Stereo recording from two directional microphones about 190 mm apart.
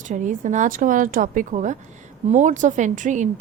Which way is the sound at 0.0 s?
40° right (ahead or behind).